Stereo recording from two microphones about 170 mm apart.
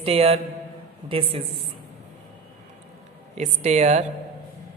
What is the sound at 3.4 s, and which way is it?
Speech, 40° right (ahead or behind).